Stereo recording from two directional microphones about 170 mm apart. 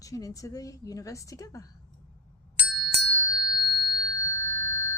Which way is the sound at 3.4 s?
25° left (ahead or behind).